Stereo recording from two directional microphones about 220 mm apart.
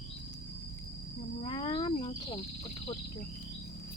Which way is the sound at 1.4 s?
25° left (ahead or behind).